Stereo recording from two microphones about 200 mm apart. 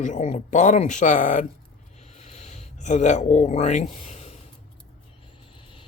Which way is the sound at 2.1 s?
35° left (ahead or behind).